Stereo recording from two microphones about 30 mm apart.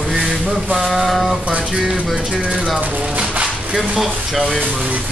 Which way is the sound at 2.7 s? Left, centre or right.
Right.